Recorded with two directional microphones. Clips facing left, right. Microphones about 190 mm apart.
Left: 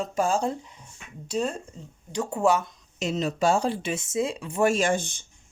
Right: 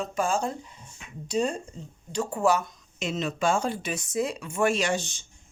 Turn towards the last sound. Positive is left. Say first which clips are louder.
# left 3 dB
turn(degrees=55)  # may be behind; listen again after turning